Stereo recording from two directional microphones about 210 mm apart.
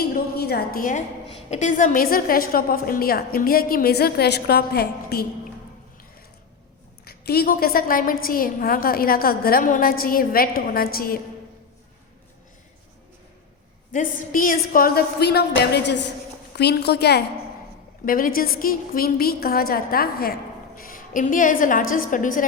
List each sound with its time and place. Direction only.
0.0 s a sound: 45° left (ahead or behind)
1.3 s a woman's voice: 30° left (ahead or behind); by 5.2 s 50° left (ahead or behind)
7.0 s a woman's voice: 45° left (ahead or behind)
13.9 s a woman's voice: 40° left (ahead or behind)